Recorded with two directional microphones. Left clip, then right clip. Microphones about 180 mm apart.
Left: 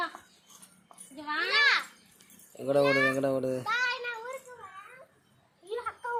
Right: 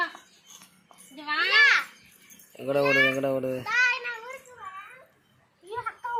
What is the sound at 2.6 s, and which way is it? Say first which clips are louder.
A child's voice: right 3 dB; centre (ahead or behind).